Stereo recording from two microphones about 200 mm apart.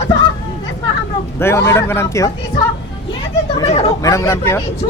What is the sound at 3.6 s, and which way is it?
Speech, 30° left (ahead or behind).